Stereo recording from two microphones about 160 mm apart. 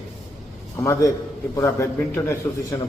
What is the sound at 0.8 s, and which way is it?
A man's voice, 20° left (ahead or behind).